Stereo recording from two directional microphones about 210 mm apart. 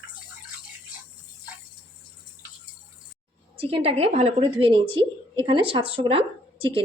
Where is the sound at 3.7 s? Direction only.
30° right (ahead or behind).